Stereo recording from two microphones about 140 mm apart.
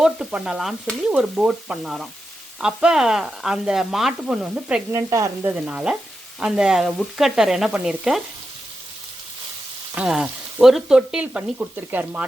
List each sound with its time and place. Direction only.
0.0 s frying: 5° right (ahead or behind)
4.9 s stir: 25° right (ahead or behind)
5.5 s stir: 10° right (ahead or behind)
6.4 s frying: 5° right (ahead or behind)
9.9 s frying: 5° right (ahead or behind)